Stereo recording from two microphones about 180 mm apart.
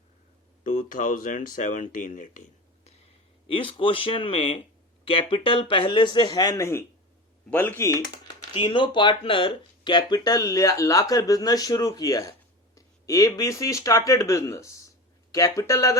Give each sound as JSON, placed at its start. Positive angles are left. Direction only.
{"t": 0.6, "sound": "speech", "side_deg": 45}
{"t": 3.5, "sound": "speech", "side_deg": 30}